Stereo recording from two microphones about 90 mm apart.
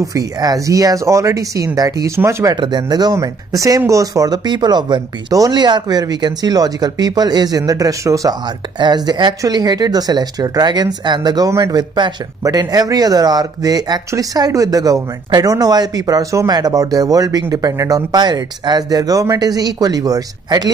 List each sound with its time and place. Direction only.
0.0 s speech: 40° right (ahead or behind)
2.5 s speech: 55° right (ahead or behind); by 8.4 s 40° right (ahead or behind)
8.7 s speech: 55° right (ahead or behind)
11.5 s speech: 40° right (ahead or behind)